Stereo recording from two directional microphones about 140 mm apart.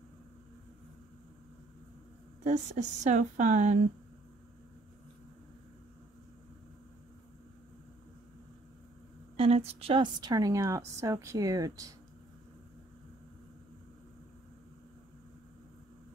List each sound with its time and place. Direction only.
2.4 s speech: 55° right (ahead or behind)
9.4 s a woman's voice: 45° right (ahead or behind); by 11.9 s 25° right (ahead or behind)